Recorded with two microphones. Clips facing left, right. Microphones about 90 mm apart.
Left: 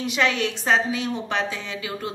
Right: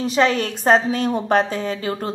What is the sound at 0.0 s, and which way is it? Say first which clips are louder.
A woman's voice: right 5 dB; 35° right (ahead or behind).